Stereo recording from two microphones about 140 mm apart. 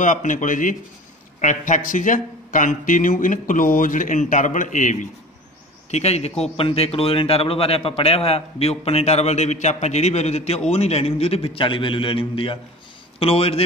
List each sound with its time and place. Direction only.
0.0 s speech: 65° left (ahead or behind)
5.9 s a man's voice: 50° left (ahead or behind)